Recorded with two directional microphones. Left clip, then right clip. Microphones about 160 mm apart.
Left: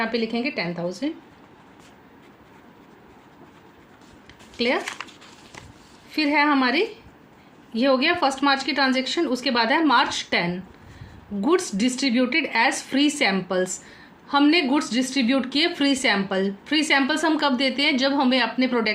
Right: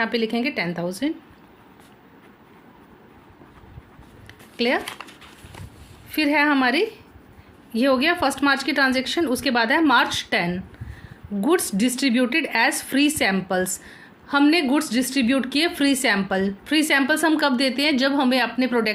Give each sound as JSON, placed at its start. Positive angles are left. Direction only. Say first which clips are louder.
{"t": 0.0, "sound": "a woman's voice", "louder": "right 2 dB", "side_deg": -55}
{"t": 4.5, "sound": "speech", "louder": "right 1 dB", "side_deg": -45}
{"t": 6.1, "sound": "a woman's voice", "louder": "right 1 dB", "side_deg": -45}